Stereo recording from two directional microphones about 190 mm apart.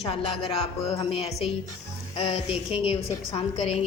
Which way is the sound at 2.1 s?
30° left (ahead or behind).